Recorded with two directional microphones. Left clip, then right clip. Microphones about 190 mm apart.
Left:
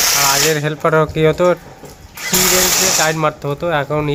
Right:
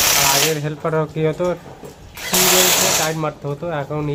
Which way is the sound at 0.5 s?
25° left (ahead or behind).